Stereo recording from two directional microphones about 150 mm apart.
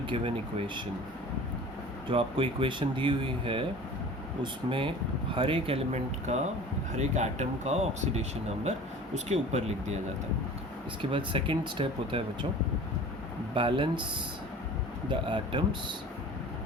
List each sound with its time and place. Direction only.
2.0 s speech: 35° right (ahead or behind)
4.7 s speech: 35° right (ahead or behind)
11.1 s speech: 35° right (ahead or behind)
13.5 s speech: 35° right (ahead or behind)
15.1 s speech: 30° right (ahead or behind)